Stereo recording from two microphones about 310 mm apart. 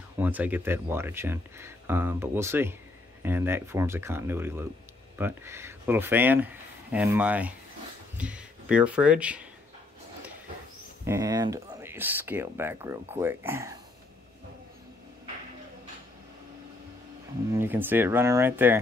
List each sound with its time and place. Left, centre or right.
0.2 s speech: centre
11.1 s speech: centre
17.5 s speech: centre